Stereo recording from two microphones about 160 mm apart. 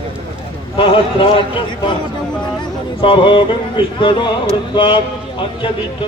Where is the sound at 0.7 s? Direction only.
35° left (ahead or behind).